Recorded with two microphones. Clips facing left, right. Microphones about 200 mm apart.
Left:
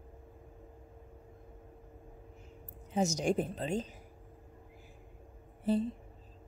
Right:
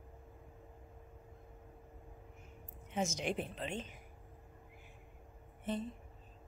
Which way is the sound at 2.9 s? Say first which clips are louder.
Left 7 dB; 40° left (ahead or behind).